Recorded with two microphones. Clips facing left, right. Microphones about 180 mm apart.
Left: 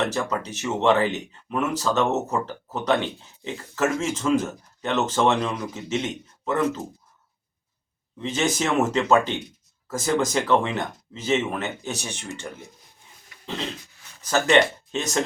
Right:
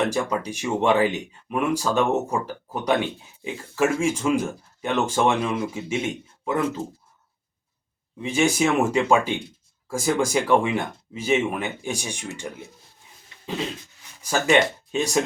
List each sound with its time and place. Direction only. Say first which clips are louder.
0.0 s speech: right 2 dB; 10° right (ahead or behind)
8.2 s speech: right 3 dB; 10° right (ahead or behind)
13.3 s dog: even; 25° right (ahead or behind)
14.2 s speech: left 1 dB; 10° right (ahead or behind)